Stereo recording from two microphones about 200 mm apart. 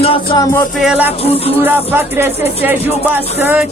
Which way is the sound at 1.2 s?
30° left (ahead or behind).